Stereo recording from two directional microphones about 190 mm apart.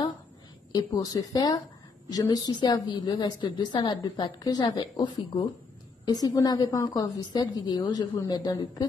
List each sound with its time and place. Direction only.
0.7 s a woman's voice: 20° left (ahead or behind)